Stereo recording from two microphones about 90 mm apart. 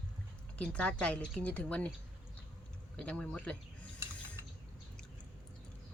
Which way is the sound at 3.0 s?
15° left (ahead or behind).